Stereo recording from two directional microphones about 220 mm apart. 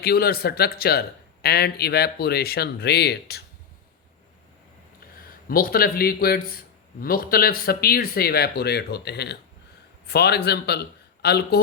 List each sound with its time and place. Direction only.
0.0 s speech: 45° left (ahead or behind)
5.5 s speech: 40° left (ahead or behind)